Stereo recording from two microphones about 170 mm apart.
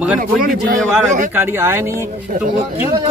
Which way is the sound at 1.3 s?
15° right (ahead or behind).